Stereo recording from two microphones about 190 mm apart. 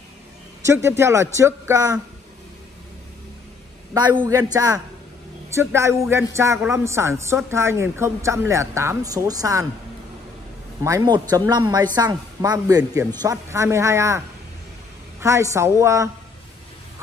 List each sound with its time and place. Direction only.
0.7 s a woman's voice: 15° right (ahead or behind)
4.2 s a man's voice: 20° right (ahead or behind)
10.8 s a man's voice: 15° right (ahead or behind)